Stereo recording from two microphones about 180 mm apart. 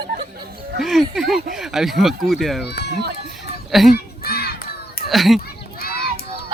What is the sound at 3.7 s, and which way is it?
Speech, centre (ahead or behind).